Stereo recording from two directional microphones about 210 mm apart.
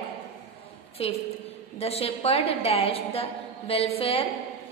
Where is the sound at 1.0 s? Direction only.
30° left (ahead or behind).